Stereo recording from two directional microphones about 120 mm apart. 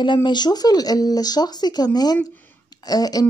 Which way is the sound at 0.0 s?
40° left (ahead or behind).